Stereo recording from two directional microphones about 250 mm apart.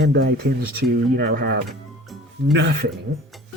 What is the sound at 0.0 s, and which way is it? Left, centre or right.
Speech, right.